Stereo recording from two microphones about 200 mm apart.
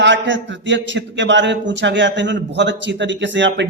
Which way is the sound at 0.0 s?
65° right (ahead or behind).